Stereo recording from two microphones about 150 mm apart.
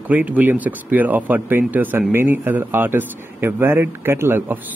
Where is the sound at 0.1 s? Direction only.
10° right (ahead or behind).